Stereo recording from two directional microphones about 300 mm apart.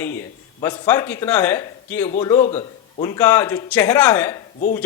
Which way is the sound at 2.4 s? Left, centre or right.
Left.